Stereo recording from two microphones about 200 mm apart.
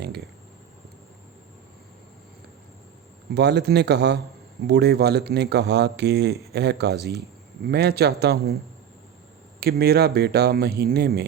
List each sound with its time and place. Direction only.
3.3 s speech: 55° right (ahead or behind)
9.6 s speech: 50° right (ahead or behind)